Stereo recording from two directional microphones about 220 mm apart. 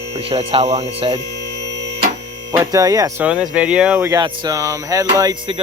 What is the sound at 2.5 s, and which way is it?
Speech, 15° right (ahead or behind).